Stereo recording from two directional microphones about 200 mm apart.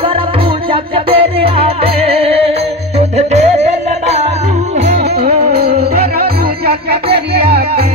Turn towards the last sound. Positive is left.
turn(degrees=-50)  # may be behind; listen again after turning